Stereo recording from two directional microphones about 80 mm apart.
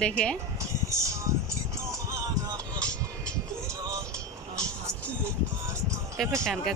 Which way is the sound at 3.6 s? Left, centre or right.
Right.